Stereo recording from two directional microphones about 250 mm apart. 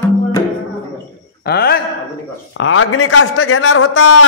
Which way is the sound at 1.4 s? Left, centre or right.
Left.